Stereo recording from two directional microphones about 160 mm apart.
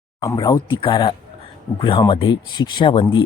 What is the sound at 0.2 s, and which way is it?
A man's voice, 25° left (ahead or behind).